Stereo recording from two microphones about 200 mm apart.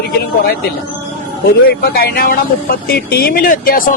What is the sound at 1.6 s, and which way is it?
Speech, 50° left (ahead or behind).